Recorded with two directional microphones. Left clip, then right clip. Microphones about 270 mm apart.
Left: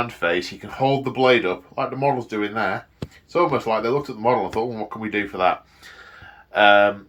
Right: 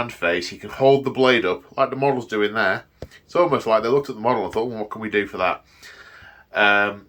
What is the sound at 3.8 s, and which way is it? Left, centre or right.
Speech, centre.